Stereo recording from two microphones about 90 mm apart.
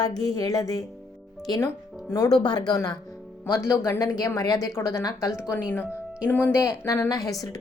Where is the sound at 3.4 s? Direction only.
30° left (ahead or behind).